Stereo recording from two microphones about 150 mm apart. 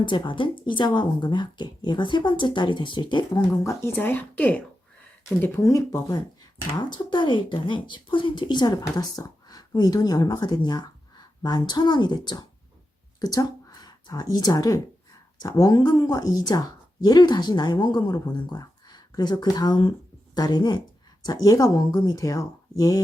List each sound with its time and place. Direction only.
0.0 s speech: 35° left (ahead or behind)
3.6 s a woman's voice: 15° left (ahead or behind)